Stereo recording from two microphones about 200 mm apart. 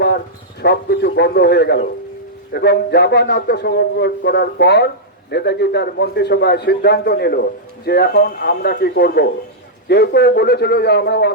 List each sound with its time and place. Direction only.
0.6 s a man's voice: 55° left (ahead or behind)